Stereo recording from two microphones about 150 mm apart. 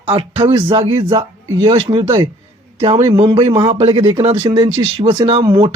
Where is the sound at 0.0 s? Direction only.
40° right (ahead or behind).